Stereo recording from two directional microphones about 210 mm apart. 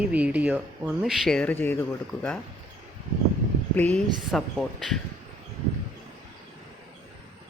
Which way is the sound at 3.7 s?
5° left (ahead or behind).